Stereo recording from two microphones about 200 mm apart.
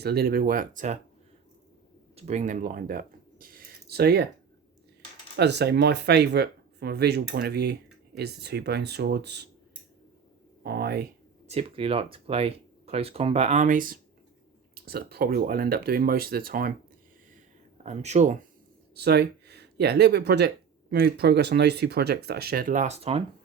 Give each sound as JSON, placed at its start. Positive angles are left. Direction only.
{"t": 0.0, "sound": "speech", "side_deg": -50}
{"t": 2.1, "sound": "speech", "side_deg": -35}
{"t": 5.4, "sound": "speech", "side_deg": -55}
{"t": 10.6, "sound": "speech", "side_deg": -55}
{"t": 11.4, "sound": "speech", "side_deg": -30}
{"t": 17.8, "sound": "speech", "side_deg": -35}
{"t": 18.9, "sound": "speech", "side_deg": -55}